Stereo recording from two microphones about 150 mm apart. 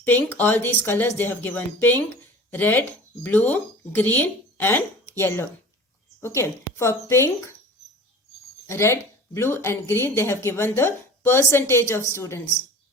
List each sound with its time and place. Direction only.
0.3 s speech: 10° left (ahead or behind)
8.6 s speech: 15° left (ahead or behind)